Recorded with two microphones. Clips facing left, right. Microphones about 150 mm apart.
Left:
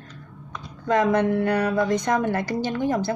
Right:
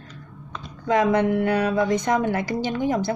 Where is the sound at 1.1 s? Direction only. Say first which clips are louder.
Right 1 dB; 20° right (ahead or behind).